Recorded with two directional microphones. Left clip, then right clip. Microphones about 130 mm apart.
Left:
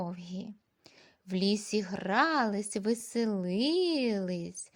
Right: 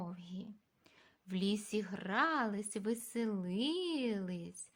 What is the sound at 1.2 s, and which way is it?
A woman's voice, 40° left (ahead or behind).